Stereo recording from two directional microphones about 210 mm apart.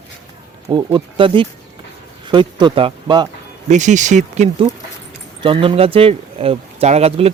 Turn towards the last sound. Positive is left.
turn(degrees=-30)  # may be behind; listen again after turning